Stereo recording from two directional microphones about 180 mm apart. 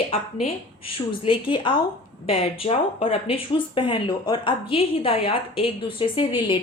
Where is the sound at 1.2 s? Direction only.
30° left (ahead or behind).